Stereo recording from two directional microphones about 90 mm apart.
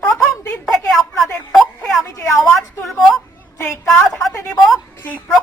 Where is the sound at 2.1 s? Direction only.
35° left (ahead or behind).